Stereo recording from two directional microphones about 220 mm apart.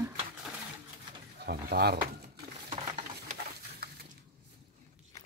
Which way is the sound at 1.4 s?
45° right (ahead or behind).